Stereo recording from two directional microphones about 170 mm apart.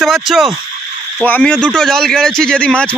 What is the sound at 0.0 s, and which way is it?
A man's voice, centre (ahead or behind).